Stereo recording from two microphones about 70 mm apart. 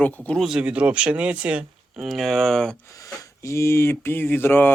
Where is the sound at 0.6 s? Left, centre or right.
Centre.